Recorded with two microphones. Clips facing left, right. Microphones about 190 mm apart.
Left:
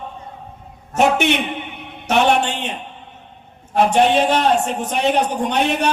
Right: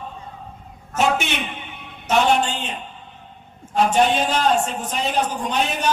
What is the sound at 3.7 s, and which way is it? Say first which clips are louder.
A man's voice: left 3 dB; 65° left (ahead or behind).